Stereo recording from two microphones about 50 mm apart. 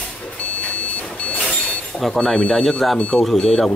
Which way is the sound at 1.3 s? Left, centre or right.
Left.